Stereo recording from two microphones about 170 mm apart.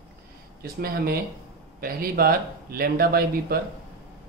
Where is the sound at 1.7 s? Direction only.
60° right (ahead or behind).